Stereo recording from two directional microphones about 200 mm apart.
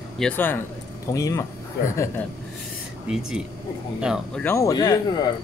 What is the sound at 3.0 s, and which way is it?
Speech, 5° right (ahead or behind).